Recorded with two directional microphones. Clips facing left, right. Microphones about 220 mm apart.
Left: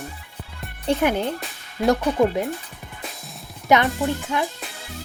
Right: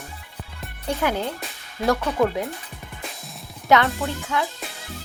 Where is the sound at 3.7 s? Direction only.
15° left (ahead or behind).